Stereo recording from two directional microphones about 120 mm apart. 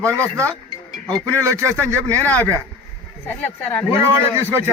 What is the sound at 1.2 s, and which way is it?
Speech, 25° right (ahead or behind).